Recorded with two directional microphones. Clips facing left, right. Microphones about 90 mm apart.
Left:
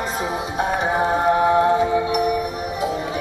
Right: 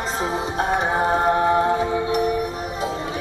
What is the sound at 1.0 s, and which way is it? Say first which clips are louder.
Music: left 2 dB; 10° left (ahead or behind).